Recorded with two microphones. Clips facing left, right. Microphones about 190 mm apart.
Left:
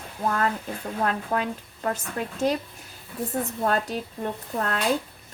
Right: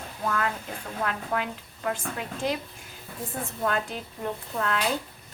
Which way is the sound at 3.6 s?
40° left (ahead or behind).